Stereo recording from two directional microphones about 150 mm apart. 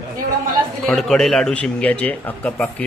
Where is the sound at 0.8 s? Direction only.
Centre (ahead or behind).